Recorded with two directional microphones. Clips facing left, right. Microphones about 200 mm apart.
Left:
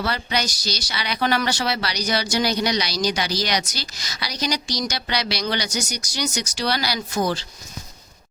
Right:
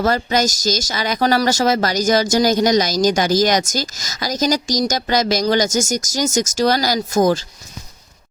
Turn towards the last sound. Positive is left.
turn(degrees=-45)  # may be behind; listen again after turning